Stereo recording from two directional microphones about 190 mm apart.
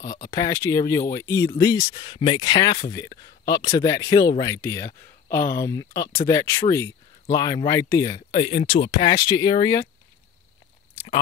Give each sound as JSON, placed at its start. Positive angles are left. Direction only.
{"t": 0.0, "sound": "speech", "side_deg": 15}